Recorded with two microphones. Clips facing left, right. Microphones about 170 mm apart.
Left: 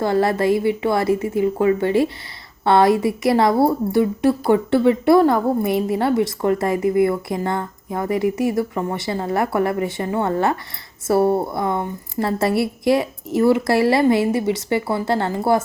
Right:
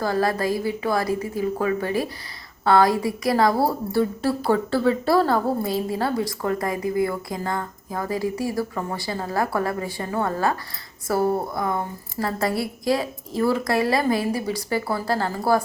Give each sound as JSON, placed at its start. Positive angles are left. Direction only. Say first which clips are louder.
{"t": 0.0, "sound": "a woman's voice", "louder": "left 5 dB", "side_deg": 25}